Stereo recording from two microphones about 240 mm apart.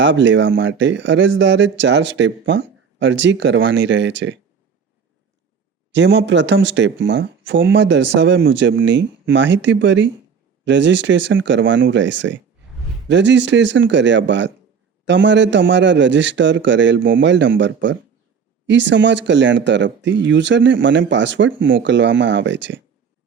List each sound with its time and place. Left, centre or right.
0.0 s speech: right
5.9 s speech: right